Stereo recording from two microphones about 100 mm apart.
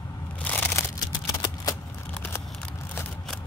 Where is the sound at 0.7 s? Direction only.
25° left (ahead or behind).